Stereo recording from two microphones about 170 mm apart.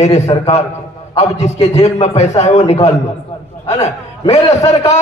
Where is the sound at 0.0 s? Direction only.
40° left (ahead or behind).